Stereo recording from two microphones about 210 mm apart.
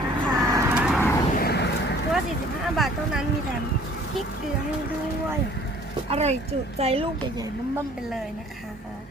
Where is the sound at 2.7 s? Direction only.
Centre (ahead or behind).